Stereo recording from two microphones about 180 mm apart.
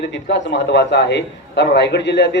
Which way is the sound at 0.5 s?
70° left (ahead or behind).